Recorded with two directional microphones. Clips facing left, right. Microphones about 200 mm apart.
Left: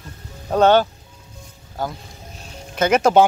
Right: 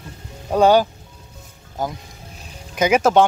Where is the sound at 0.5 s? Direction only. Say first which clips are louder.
Even; 10° right (ahead or behind).